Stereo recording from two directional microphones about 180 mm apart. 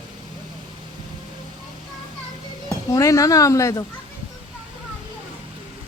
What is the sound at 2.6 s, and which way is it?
Speech, 20° left (ahead or behind).